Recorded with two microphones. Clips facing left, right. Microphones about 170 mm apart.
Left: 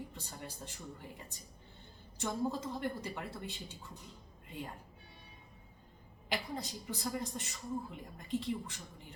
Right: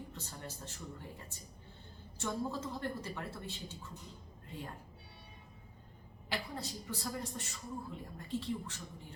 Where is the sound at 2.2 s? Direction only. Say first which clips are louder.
Left 2 dB; 15° left (ahead or behind).